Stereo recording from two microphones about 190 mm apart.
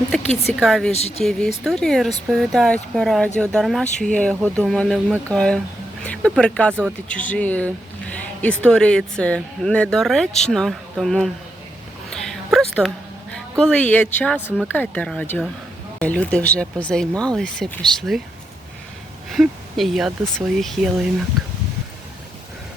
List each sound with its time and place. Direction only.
0.4 s speech: centre (ahead or behind)
0.9 s speech: 35° left (ahead or behind)
1.2 s speech: 5° left (ahead or behind)
8.1 s a sound: 5° left (ahead or behind)
8.6 s speech: 5° left (ahead or behind)
12.1 s a sound: 5° left (ahead or behind)
13.3 s a woman's voice: 5° left (ahead or behind)
19.3 s speech: centre (ahead or behind)